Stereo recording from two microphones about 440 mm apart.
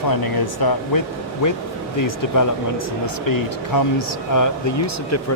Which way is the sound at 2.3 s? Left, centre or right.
Left.